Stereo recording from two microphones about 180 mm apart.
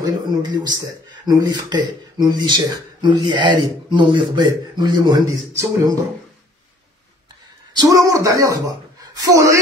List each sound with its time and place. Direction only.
0.0 s speech: 25° right (ahead or behind)
7.7 s a woman's voice: 20° right (ahead or behind)